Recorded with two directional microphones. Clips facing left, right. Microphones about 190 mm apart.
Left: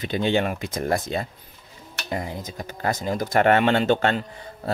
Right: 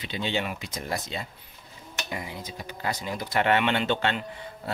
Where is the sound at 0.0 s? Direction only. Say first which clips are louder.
Left 7 dB; 50° left (ahead or behind).